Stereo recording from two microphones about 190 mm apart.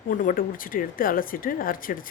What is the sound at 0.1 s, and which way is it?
Speech, 45° left (ahead or behind).